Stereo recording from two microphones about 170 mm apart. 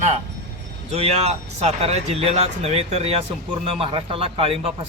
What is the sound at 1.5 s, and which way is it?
A man's voice, 40° right (ahead or behind).